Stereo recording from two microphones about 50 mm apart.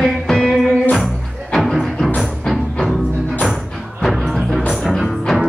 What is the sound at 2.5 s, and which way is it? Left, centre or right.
Music, centre.